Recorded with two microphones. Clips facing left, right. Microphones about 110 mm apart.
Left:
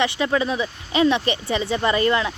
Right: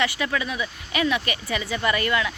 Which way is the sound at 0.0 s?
25° left (ahead or behind).